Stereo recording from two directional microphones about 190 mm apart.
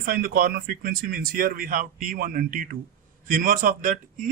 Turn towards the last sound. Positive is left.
turn(degrees=-45)  # may be behind; listen again after turning